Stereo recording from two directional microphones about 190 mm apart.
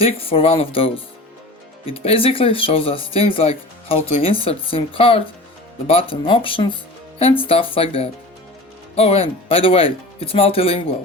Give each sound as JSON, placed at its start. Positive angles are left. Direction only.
{"t": 0.0, "sound": "speech", "side_deg": 30}